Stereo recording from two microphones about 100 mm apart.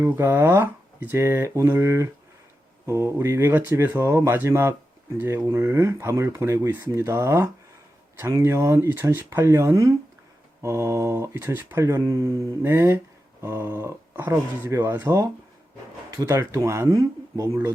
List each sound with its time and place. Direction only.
0.0 s speech: 25° right (ahead or behind)
3.9 s speech: 30° right (ahead or behind)
16.2 s speech: 25° right (ahead or behind)